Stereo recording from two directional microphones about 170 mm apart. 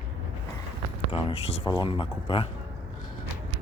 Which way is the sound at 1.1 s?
35° left (ahead or behind).